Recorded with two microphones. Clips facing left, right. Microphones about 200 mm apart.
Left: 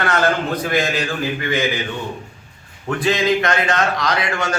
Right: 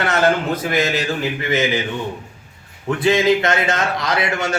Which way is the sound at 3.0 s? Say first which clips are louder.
Right 2 dB; 25° right (ahead or behind).